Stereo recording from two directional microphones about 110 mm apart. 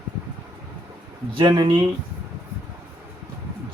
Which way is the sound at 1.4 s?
45° right (ahead or behind).